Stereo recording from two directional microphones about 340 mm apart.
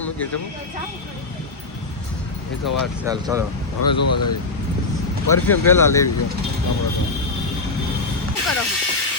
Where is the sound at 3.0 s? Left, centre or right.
Centre.